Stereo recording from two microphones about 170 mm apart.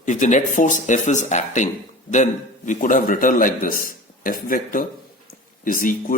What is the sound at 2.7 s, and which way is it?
A man's voice, 50° left (ahead or behind).